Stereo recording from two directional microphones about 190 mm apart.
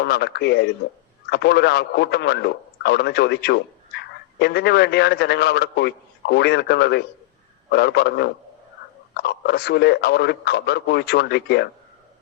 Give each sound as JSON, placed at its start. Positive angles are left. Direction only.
{"t": 0.0, "sound": "a man's voice", "side_deg": 60}